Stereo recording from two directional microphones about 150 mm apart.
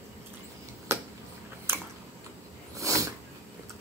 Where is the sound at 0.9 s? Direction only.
15° right (ahead or behind).